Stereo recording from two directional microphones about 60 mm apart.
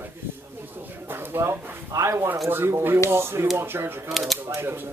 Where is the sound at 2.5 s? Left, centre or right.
Right.